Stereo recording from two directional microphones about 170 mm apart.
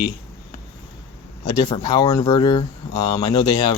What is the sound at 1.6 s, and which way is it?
Speech, 25° left (ahead or behind).